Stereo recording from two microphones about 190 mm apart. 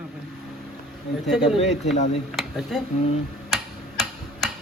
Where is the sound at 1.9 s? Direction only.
35° left (ahead or behind).